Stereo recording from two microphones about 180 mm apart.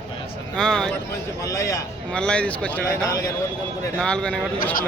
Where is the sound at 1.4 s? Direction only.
15° left (ahead or behind).